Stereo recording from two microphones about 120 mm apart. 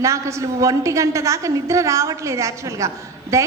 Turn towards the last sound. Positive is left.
turn(degrees=-25)  # may be behind; listen again after turning